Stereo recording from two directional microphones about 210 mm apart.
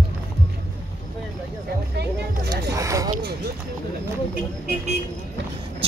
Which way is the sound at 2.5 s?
15° right (ahead or behind).